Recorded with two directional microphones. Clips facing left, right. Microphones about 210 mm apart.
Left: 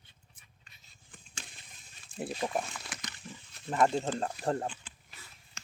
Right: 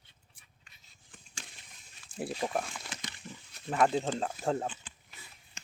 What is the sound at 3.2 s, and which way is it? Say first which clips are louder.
Pig: left 1 dB; 20° right (ahead or behind).